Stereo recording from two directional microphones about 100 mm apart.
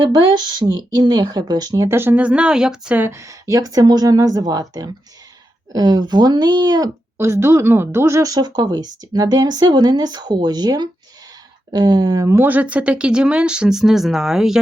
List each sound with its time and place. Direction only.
0.1 s speech: 45° right (ahead or behind)
2.0 s speech: 20° right (ahead or behind)
3.0 s speech: 30° right (ahead or behind)
5.7 s speech: 45° right (ahead or behind)
7.2 s speech: 25° right (ahead or behind)
12.4 s speech: 15° right (ahead or behind)